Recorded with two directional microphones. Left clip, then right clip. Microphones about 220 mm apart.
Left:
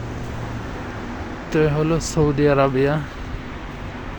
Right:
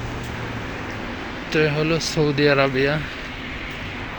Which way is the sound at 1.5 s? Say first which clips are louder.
Left 1 dB; 20° left (ahead or behind).